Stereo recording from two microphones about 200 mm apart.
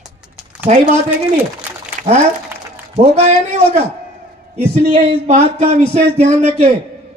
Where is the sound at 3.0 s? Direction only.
35° right (ahead or behind).